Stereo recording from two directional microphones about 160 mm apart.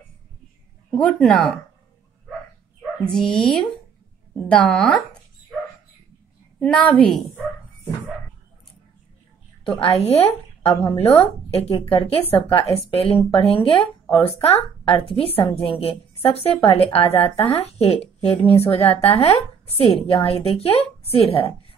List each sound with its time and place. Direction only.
0.8 s speech: 5° left (ahead or behind)
3.1 s speech: 5° left (ahead or behind)
6.6 s speech: 10° left (ahead or behind)
9.7 s a woman's voice: 40° left (ahead or behind)